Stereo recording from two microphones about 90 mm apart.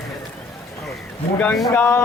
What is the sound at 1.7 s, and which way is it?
Speech, 30° left (ahead or behind).